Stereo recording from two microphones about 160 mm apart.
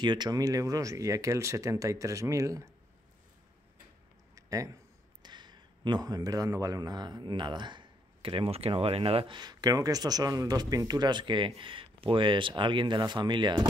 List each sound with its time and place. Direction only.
0.0 s speech: 25° right (ahead or behind)
4.4 s a sound: 20° right (ahead or behind)
5.2 s speech: 25° right (ahead or behind)